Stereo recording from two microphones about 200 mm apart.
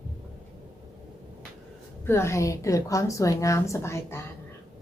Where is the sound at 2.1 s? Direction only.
15° left (ahead or behind).